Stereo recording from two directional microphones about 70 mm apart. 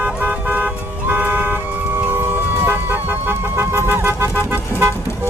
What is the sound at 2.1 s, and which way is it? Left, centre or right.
Vehicle, right.